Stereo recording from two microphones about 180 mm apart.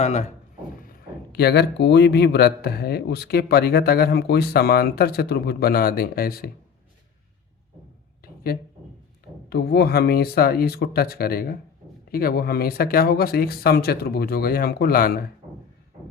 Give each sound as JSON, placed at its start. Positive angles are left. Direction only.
{"t": 0.0, "sound": "speech", "side_deg": 40}
{"t": 0.8, "sound": "speech", "side_deg": 55}
{"t": 9.5, "sound": "speech", "side_deg": 65}